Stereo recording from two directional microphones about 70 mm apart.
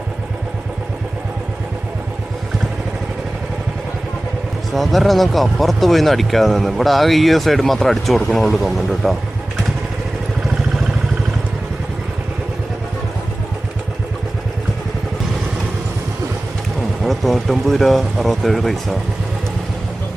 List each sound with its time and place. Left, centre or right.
4.7 s speech: centre
17.0 s speech: centre